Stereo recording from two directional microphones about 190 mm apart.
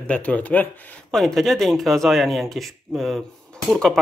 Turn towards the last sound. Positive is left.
turn(degrees=0)  # may be behind; listen again after turning